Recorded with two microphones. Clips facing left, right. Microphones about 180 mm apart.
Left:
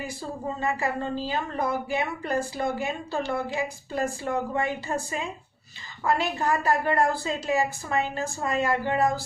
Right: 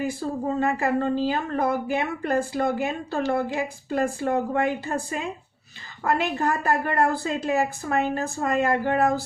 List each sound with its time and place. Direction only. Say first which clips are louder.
0.6 s a woman's voice: right 4 dB; 55° right (ahead or behind)
6.0 s a woman's voice: right 2 dB; 55° right (ahead or behind)